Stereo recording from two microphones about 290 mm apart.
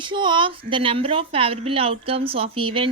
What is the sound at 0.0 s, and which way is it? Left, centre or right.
A woman's voice, centre.